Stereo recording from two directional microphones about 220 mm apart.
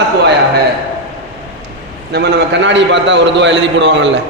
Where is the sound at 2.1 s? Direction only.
50° right (ahead or behind).